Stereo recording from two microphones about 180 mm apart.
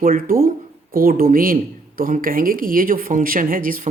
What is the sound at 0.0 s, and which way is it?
Speech, 50° right (ahead or behind).